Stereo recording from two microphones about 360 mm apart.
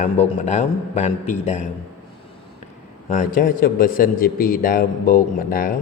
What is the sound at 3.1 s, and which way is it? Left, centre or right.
Speech, left.